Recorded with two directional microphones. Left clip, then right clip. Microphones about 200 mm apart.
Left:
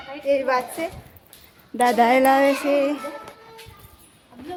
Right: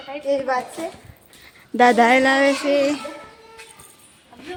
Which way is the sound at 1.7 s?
20° right (ahead or behind).